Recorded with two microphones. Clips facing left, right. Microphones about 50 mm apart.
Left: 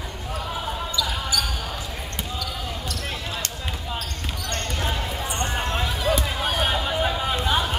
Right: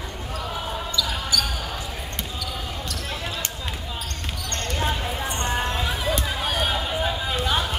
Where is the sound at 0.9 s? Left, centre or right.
Centre.